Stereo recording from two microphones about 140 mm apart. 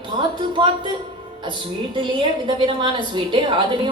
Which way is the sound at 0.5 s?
35° right (ahead or behind).